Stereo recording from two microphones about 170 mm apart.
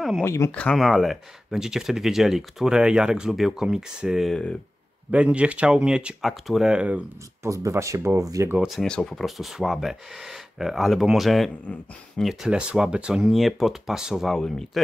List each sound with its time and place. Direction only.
0.2 s speech: 15° left (ahead or behind)
5.1 s speech: 5° right (ahead or behind)
7.4 s speech: 20° right (ahead or behind)
8.5 s speech: centre (ahead or behind)